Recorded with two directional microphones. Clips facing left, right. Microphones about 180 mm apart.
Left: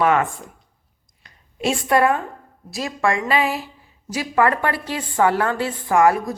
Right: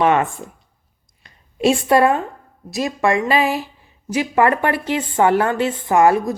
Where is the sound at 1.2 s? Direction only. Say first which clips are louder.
Right 7 dB; 25° right (ahead or behind).